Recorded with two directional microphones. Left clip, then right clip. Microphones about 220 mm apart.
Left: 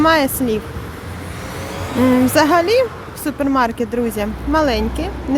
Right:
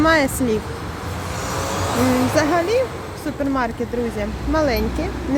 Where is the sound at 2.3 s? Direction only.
20° left (ahead or behind).